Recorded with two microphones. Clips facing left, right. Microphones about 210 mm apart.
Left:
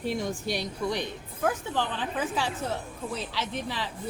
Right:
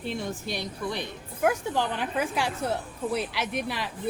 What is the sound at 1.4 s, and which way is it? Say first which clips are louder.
A woman's voice: right 3 dB; 15° right (ahead or behind).